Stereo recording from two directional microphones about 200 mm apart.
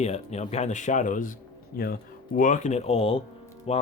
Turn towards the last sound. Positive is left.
turn(degrees=30)  # may be behind; listen again after turning